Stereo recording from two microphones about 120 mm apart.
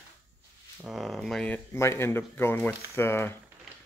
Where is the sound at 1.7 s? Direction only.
20° left (ahead or behind).